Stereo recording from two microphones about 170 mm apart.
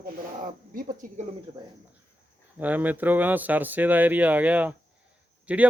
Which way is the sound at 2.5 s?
10° right (ahead or behind).